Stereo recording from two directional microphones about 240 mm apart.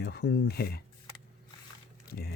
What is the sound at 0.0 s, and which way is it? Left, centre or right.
Speech, left.